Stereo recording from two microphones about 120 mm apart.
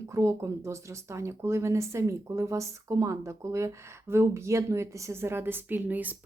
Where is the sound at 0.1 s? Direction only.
25° right (ahead or behind).